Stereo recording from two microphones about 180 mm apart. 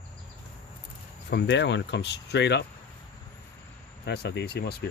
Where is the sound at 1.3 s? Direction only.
75° left (ahead or behind).